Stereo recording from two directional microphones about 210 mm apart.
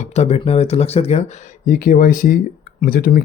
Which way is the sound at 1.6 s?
40° left (ahead or behind).